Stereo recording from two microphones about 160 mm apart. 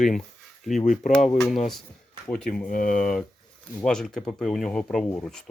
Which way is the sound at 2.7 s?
55° left (ahead or behind).